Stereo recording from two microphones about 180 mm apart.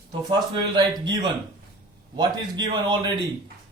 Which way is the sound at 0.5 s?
25° right (ahead or behind).